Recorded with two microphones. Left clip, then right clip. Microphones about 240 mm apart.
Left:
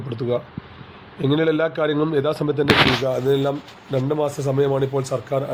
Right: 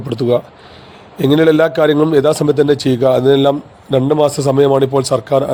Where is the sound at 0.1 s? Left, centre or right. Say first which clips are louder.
Right 9 dB; right.